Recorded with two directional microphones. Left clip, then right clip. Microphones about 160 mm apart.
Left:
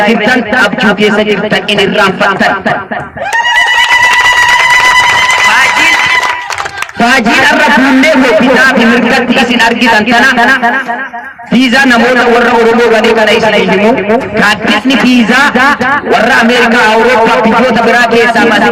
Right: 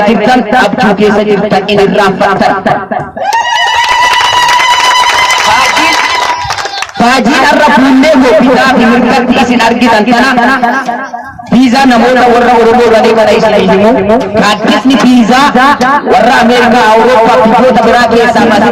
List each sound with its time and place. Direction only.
0.0 s speech: 35° left (ahead or behind)
7.3 s speech: 35° left (ahead or behind)
11.6 s a man's voice: 30° left (ahead or behind)